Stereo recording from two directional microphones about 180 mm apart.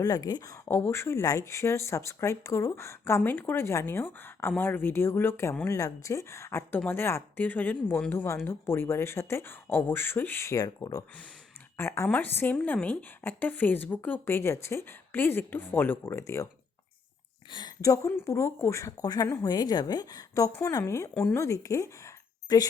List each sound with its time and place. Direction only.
0.0 s speech: 20° left (ahead or behind)
17.5 s speech: 20° left (ahead or behind)